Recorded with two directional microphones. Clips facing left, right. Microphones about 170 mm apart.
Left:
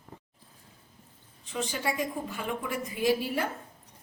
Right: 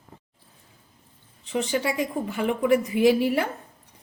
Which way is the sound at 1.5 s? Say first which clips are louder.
Right 6 dB; 70° right (ahead or behind).